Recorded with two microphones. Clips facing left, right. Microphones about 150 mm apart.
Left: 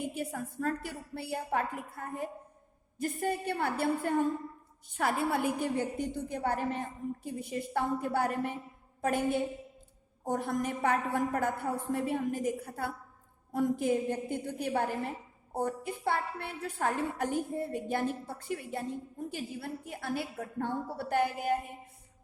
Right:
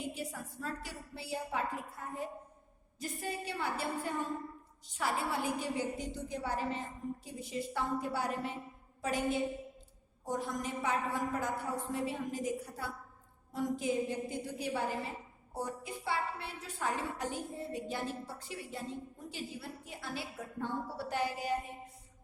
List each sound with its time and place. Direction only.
0.0 s a woman's voice: 55° left (ahead or behind)
9.0 s a sound: 55° left (ahead or behind)
10.2 s a woman's voice: 55° left (ahead or behind)